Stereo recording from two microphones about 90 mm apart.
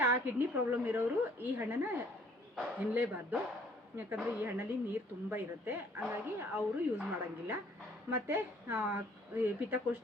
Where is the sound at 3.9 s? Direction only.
20° right (ahead or behind).